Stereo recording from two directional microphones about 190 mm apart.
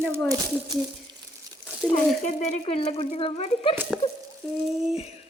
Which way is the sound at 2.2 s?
30° left (ahead or behind).